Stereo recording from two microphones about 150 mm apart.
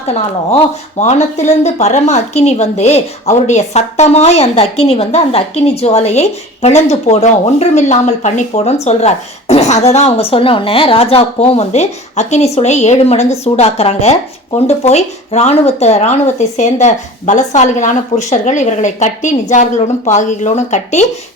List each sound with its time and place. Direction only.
0.9 s speech: 50° left (ahead or behind)